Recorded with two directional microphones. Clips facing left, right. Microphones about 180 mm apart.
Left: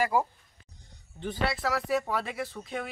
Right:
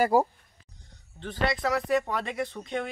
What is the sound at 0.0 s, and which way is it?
Speech, 40° right (ahead or behind).